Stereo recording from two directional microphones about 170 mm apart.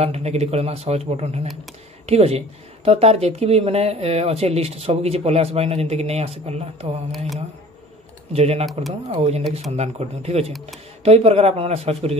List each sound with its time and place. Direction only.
0.0 s speech: 40° right (ahead or behind)
8.3 s speech: 35° right (ahead or behind)